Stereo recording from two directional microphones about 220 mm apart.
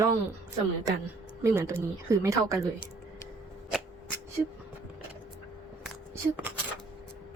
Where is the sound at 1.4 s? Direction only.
15° right (ahead or behind).